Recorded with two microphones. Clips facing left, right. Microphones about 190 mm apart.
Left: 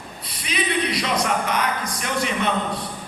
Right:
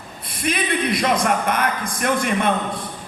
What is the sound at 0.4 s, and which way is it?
Music, 50° right (ahead or behind).